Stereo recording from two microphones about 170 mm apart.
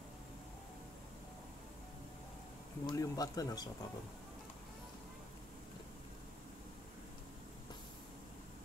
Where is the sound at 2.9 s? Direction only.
20° left (ahead or behind).